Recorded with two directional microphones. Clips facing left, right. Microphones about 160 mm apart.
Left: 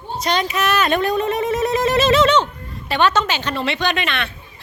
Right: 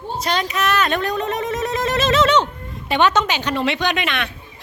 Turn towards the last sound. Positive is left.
turn(degrees=-10)  # may be behind; listen again after turning